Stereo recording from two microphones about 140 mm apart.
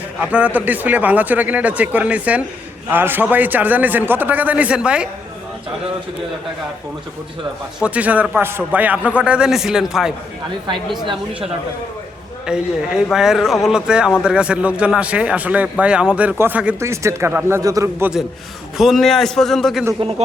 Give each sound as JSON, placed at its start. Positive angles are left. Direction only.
{"t": 0.2, "sound": "a man's voice", "side_deg": -10}
{"t": 7.8, "sound": "a man's voice", "side_deg": -10}
{"t": 11.0, "sound": "a woman's voice", "side_deg": -35}
{"t": 12.5, "sound": "a man's voice", "side_deg": -5}
{"t": 18.8, "sound": "speech", "side_deg": 0}
{"t": 20.0, "sound": "a man's voice", "side_deg": -45}